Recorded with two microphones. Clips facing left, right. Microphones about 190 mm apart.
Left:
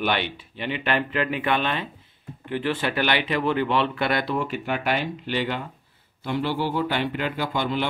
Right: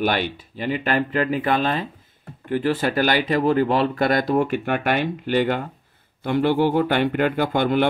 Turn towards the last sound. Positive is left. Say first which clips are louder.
# right 6 dB
turn(degrees=-55)  # may be behind; listen again after turning